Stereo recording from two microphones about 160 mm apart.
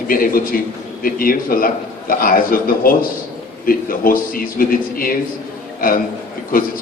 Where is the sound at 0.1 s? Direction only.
65° left (ahead or behind).